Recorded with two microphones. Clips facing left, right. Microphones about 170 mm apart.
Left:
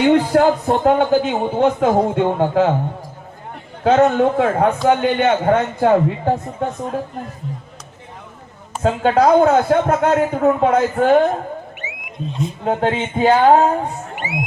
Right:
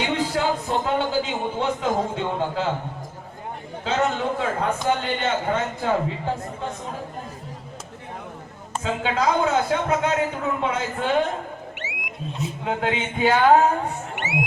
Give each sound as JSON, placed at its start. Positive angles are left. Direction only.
{"t": 0.0, "sound": "a man's voice", "side_deg": 60}
{"t": 3.8, "sound": "a man's voice", "side_deg": 55}
{"t": 8.8, "sound": "a man's voice", "side_deg": 50}
{"t": 11.8, "sound": "a sound", "side_deg": -90}
{"t": 12.3, "sound": "speech", "side_deg": -5}
{"t": 12.6, "sound": "speech", "side_deg": 40}
{"t": 14.2, "sound": "music", "side_deg": -75}